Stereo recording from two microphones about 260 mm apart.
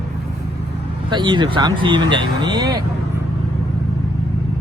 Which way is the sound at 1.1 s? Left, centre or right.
Centre.